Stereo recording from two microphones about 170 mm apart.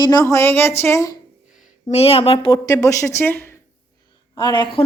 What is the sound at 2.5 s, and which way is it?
A woman's voice, 20° left (ahead or behind).